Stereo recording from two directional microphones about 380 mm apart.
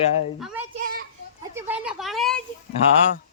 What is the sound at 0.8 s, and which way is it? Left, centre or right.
Children playing, right.